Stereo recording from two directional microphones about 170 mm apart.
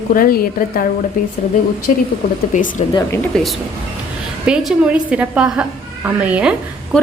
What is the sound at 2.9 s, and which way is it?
Speech, 25° left (ahead or behind).